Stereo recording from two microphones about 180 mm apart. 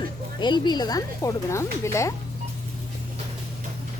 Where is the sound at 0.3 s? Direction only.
25° left (ahead or behind).